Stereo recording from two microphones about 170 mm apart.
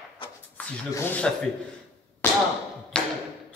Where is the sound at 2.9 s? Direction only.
5° left (ahead or behind).